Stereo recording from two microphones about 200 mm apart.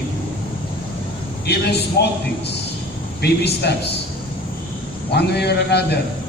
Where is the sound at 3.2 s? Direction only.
55° left (ahead or behind).